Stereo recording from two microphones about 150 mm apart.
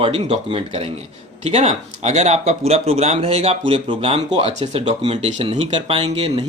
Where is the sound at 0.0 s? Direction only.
40° right (ahead or behind).